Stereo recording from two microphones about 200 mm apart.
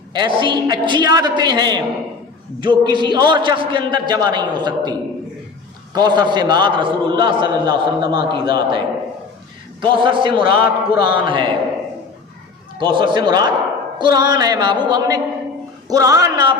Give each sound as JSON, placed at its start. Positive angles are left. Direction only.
{"t": 0.1, "sound": "a man's voice", "side_deg": -25}
{"t": 9.8, "sound": "a man's voice", "side_deg": -25}
{"t": 12.8, "sound": "a man's voice", "side_deg": -25}